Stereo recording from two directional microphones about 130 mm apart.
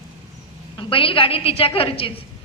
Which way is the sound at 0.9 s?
45° left (ahead or behind).